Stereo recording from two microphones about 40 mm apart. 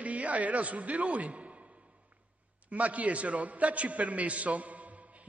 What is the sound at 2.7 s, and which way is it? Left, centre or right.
A man's voice, right.